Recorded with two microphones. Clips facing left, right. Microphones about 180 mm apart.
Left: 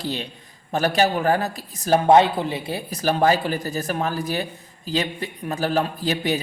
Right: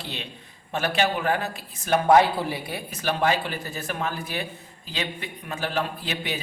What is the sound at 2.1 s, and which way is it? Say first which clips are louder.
Speech: left 2 dB; 20° left (ahead or behind).